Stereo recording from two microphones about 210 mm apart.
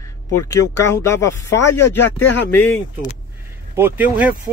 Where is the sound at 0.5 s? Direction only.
15° left (ahead or behind).